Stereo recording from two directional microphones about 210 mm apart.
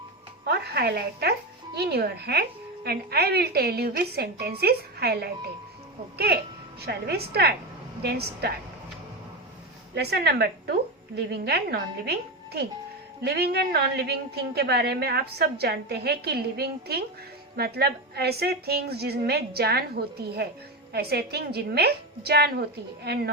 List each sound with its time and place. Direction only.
0.4 s a woman's voice: 50° right (ahead or behind)
8.0 s a woman's voice: 50° right (ahead or behind)
9.9 s a woman's voice: 50° right (ahead or behind)
13.2 s a woman's voice: 50° right (ahead or behind)